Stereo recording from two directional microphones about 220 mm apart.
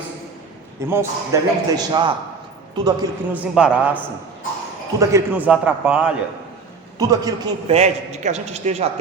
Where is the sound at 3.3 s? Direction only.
5° right (ahead or behind).